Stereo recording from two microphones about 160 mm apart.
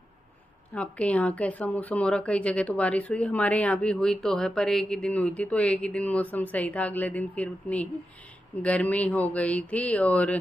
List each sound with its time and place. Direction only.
0.7 s speech: 10° left (ahead or behind)